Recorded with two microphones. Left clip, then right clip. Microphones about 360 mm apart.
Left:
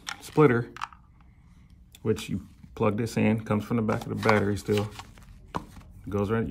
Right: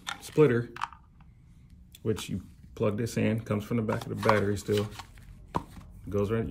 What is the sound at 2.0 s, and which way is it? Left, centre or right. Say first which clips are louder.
Speech: left 3 dB; centre.